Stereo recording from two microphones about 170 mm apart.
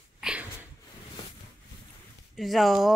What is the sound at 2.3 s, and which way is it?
Speech, centre (ahead or behind).